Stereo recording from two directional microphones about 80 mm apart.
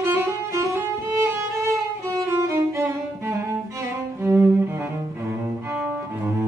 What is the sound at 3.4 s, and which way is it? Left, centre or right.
Cello, right.